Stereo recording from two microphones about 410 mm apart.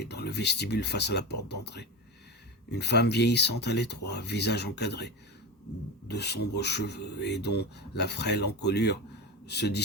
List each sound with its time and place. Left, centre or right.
0.0 s speech: left